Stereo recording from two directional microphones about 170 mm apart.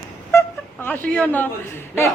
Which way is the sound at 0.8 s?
10° left (ahead or behind).